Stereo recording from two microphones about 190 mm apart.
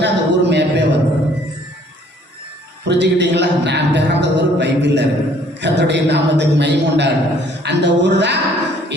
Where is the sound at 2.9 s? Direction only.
65° right (ahead or behind).